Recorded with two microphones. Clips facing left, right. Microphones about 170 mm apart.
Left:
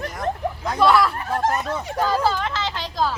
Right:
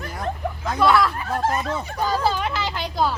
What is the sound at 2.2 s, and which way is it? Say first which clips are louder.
Speech: even; 15° right (ahead or behind).